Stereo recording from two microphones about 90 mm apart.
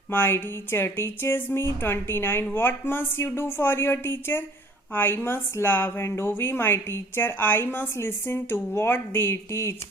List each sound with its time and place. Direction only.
0.1 s a woman's voice: 25° left (ahead or behind)